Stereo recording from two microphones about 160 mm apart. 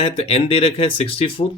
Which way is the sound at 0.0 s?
40° left (ahead or behind).